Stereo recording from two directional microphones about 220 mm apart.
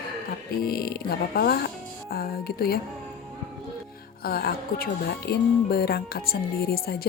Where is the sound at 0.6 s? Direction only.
45° left (ahead or behind).